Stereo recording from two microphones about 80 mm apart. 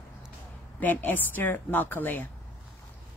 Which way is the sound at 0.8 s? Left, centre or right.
Left.